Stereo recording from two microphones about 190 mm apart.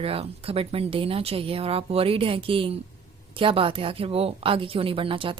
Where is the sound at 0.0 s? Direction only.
30° right (ahead or behind).